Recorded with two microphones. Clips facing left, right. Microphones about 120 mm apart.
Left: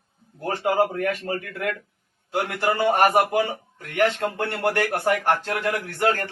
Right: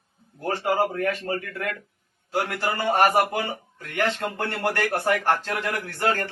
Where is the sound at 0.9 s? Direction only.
15° left (ahead or behind).